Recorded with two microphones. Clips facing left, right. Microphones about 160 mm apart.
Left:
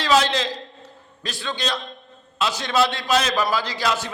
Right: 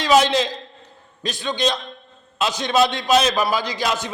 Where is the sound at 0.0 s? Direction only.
15° right (ahead or behind).